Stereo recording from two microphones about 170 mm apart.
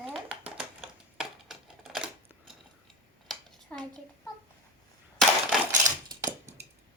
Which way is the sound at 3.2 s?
Centre (ahead or behind).